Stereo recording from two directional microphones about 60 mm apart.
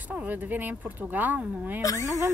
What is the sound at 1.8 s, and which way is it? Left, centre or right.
Speech, left.